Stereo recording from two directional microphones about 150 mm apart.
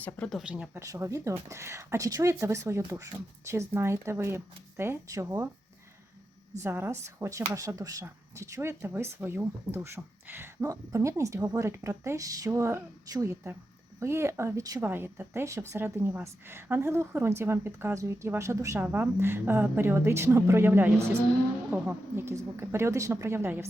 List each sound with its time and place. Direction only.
0.0 s speech: 5° left (ahead or behind); by 5.5 s 20° right (ahead or behind)
6.6 s speech: 15° right (ahead or behind)